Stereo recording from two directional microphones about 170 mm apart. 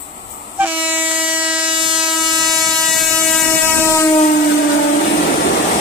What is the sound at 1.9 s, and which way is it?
Train, 5° right (ahead or behind).